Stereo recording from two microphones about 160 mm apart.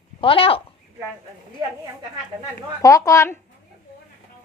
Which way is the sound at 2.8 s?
20° left (ahead or behind).